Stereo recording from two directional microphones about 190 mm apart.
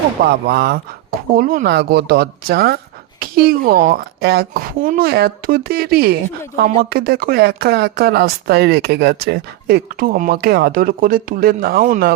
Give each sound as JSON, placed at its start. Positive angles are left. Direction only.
{"t": 0.4, "sound": "speech", "side_deg": -60}